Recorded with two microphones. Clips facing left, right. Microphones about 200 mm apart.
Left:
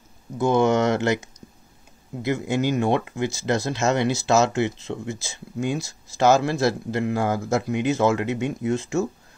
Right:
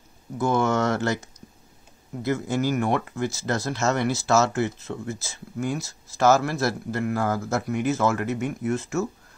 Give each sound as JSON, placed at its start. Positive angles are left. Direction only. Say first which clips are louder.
{"t": 0.4, "sound": "a man's voice", "louder": "left 3 dB", "side_deg": 20}